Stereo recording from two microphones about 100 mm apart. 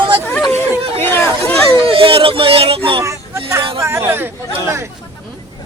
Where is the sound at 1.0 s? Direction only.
20° left (ahead or behind).